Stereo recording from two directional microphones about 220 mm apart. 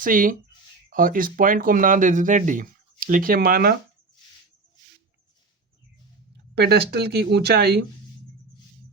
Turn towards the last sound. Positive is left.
turn(degrees=-45)  # may be behind; listen again after turning